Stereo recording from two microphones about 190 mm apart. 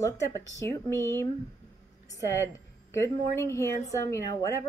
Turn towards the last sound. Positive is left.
turn(degrees=15)  # may be behind; listen again after turning